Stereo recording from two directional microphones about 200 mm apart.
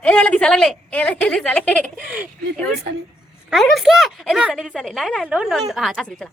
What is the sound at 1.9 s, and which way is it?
Speech, 5° right (ahead or behind).